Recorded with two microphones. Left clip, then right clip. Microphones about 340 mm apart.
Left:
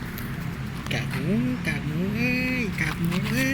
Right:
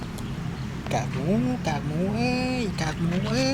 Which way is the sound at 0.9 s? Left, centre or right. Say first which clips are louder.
Right 2 dB; centre.